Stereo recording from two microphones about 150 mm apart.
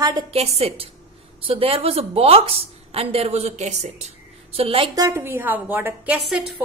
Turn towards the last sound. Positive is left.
turn(degrees=-5)  # may be behind; listen again after turning